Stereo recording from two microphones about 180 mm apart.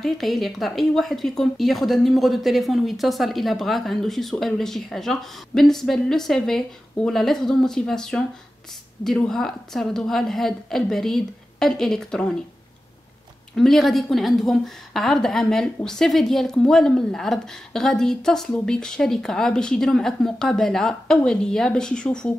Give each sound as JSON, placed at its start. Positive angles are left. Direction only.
{"t": 0.0, "sound": "a woman's voice", "side_deg": 0}
{"t": 13.6, "sound": "a woman's voice", "side_deg": 0}